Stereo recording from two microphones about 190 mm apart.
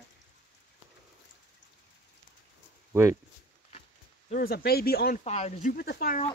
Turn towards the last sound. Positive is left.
turn(degrees=50)  # may be behind; listen again after turning